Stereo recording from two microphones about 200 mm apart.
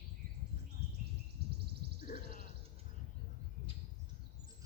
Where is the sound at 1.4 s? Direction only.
55° right (ahead or behind).